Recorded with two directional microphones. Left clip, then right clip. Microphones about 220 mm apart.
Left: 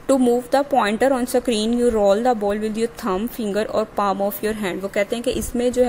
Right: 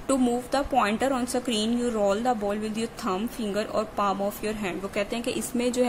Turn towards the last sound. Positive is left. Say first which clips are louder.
# left 7 dB
turn(degrees=20)  # may be behind; listen again after turning